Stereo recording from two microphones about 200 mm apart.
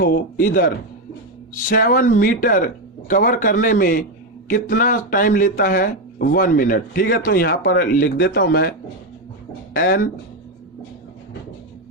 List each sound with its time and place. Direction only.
0.0 s speech: 45° left (ahead or behind)
9.7 s speech: 45° left (ahead or behind)